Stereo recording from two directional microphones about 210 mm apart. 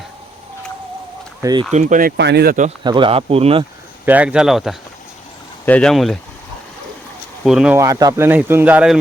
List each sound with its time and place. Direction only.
1.4 s speech: 20° right (ahead or behind)
1.7 s speech: 35° right (ahead or behind)
2.6 s speech: 25° right (ahead or behind)
4.0 s speech: 5° right (ahead or behind)
7.4 s speech: 5° right (ahead or behind)
7.8 s speech: 15° right (ahead or behind)